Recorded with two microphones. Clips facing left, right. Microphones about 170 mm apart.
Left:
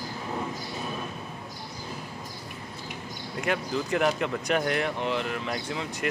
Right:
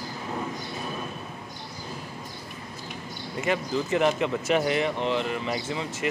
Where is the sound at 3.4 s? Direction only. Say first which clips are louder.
Right 2 dB; centre (ahead or behind).